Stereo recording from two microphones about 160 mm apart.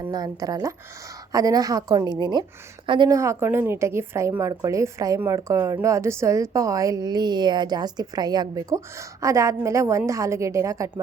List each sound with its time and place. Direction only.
0.1 s a woman's voice: 25° right (ahead or behind)